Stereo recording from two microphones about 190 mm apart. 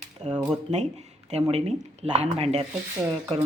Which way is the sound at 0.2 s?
20° right (ahead or behind).